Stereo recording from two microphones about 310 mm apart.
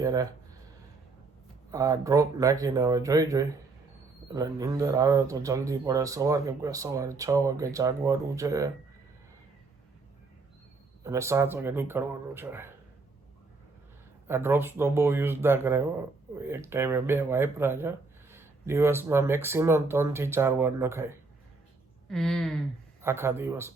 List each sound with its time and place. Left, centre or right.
0.0 s speech: centre
1.7 s speech: centre
11.0 s speech: centre
14.3 s speech: centre
22.1 s speech: centre